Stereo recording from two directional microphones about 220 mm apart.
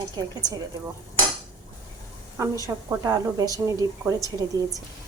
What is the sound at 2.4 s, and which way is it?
A woman's voice, 15° right (ahead or behind).